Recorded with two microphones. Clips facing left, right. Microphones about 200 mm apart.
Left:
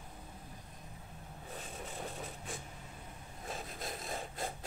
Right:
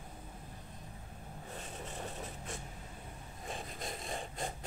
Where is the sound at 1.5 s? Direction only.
Centre (ahead or behind).